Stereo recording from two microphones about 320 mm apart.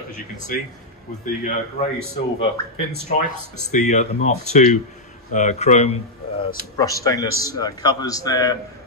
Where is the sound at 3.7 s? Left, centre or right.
Left.